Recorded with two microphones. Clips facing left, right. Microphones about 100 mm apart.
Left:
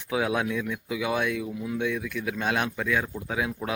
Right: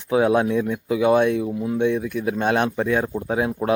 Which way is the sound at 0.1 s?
35° right (ahead or behind).